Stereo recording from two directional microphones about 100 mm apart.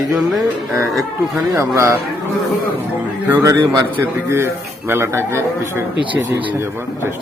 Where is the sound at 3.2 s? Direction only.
25° right (ahead or behind).